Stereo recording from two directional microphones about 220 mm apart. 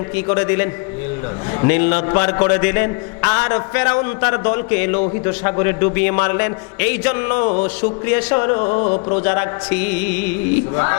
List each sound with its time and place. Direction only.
0.3 s a man's voice: 15° left (ahead or behind)
7.4 s speech: 25° left (ahead or behind)
7.8 s speech: 10° left (ahead or behind); by 9.2 s 25° left (ahead or behind)
9.2 s a man's voice: 15° left (ahead or behind)